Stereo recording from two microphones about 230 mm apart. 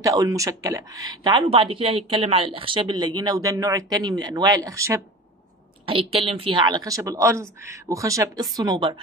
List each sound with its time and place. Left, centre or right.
0.0 s speech: centre
5.9 s speech: right